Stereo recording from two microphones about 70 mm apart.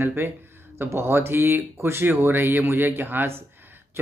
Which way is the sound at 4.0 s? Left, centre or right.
Right.